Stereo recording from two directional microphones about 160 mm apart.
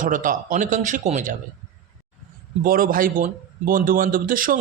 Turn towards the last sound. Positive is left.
turn(degrees=-60)  # may be behind; listen again after turning